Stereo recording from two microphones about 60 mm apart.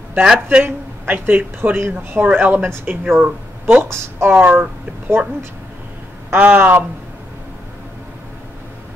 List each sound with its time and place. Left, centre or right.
0.2 s speech: centre
0.7 s speech: right
2.2 s speech: right
6.3 s speech: right